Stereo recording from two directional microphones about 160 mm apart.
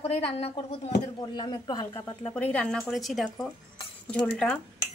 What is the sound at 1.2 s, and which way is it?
Speech, 25° left (ahead or behind).